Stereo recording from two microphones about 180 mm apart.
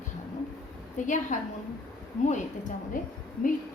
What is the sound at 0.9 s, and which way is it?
Speech, 45° left (ahead or behind).